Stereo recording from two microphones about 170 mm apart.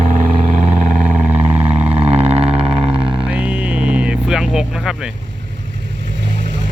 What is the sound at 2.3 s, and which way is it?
Vehicle, 35° right (ahead or behind).